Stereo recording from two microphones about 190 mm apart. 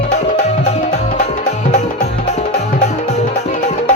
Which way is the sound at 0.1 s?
40° left (ahead or behind).